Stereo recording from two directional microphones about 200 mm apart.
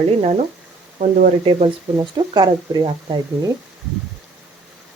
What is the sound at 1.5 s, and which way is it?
Speech, 30° right (ahead or behind).